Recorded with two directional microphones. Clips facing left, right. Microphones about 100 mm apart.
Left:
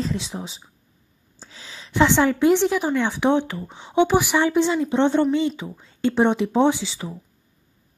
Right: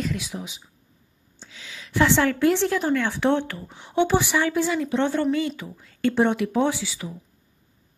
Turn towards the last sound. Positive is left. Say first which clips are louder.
# left 5 dB
turn(degrees=25)  # may be behind; listen again after turning